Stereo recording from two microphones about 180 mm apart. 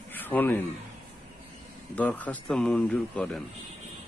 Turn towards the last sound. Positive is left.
turn(degrees=5)  # may be behind; listen again after turning